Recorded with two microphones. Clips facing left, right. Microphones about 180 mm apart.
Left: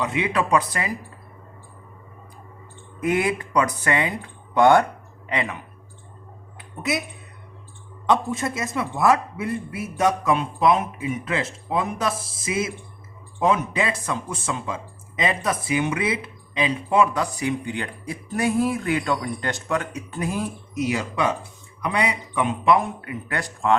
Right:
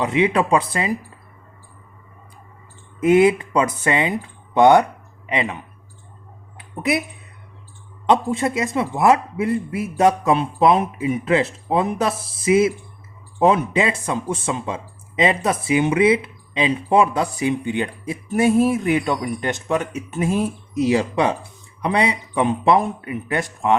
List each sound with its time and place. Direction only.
0.0 s speech: 25° right (ahead or behind)
3.0 s speech: 25° right (ahead or behind)
8.3 s speech: 20° right (ahead or behind)